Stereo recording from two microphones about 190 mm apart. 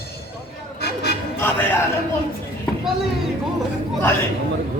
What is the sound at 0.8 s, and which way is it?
Music, 55° left (ahead or behind).